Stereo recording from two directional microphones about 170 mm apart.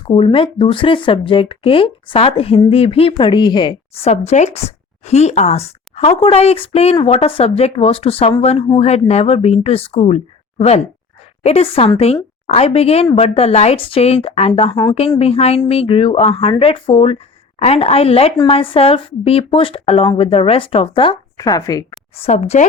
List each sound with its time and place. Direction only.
0.1 s speech: 30° left (ahead or behind)
22.1 s speech: 35° left (ahead or behind)